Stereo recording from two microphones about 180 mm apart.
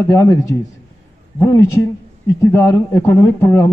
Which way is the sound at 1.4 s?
15° left (ahead or behind).